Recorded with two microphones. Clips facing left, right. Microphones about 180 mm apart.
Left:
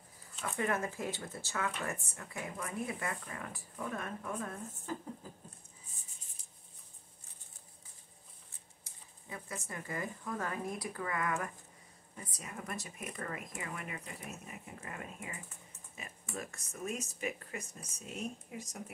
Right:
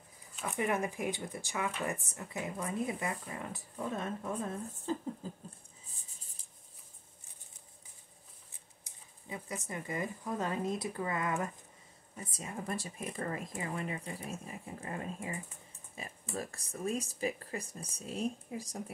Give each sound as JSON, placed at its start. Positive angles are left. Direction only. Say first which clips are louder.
{"t": 0.4, "sound": "speech", "louder": "right 2 dB", "side_deg": -15}
{"t": 8.8, "sound": "speech", "louder": "right 3 dB", "side_deg": -20}